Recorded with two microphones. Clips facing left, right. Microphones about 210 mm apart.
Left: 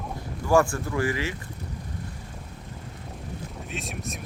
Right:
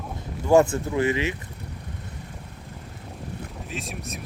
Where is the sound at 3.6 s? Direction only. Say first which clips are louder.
Even; centre (ahead or behind).